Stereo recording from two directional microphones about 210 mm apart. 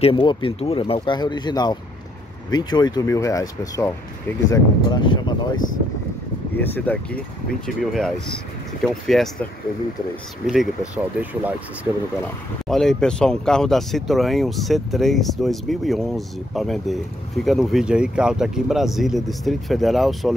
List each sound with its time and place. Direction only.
0.0 s speech: 25° left (ahead or behind)
6.5 s speech: 10° left (ahead or behind)